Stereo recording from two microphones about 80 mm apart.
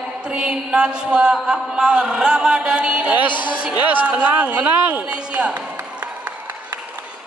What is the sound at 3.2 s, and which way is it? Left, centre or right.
Speech, left.